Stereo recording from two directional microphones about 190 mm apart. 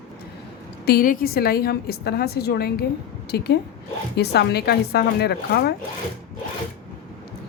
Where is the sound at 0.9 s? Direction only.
50° left (ahead or behind).